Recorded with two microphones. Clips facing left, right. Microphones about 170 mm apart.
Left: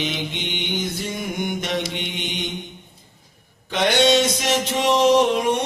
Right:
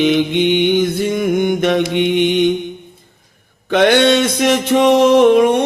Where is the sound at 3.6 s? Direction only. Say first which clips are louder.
Right 7 dB; 60° right (ahead or behind).